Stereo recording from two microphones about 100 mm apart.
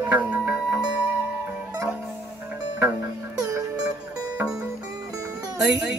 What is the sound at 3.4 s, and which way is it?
Music, 35° right (ahead or behind).